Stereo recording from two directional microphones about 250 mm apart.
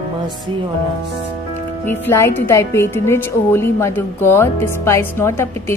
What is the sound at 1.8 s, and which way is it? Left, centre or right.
A woman's voice, centre.